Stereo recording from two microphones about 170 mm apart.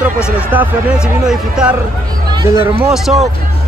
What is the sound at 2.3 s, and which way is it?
Speech, 25° right (ahead or behind).